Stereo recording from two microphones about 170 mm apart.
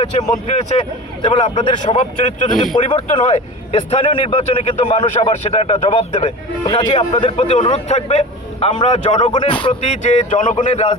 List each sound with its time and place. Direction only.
0.4 s speech: 40° left (ahead or behind)
1.2 s a man's voice: 30° left (ahead or behind)
9.3 s speech: 30° left (ahead or behind)
9.8 s speech: 45° left (ahead or behind)